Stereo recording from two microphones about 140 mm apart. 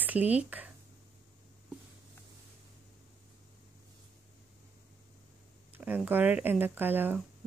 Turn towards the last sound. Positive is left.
turn(degrees=-15)  # may be behind; listen again after turning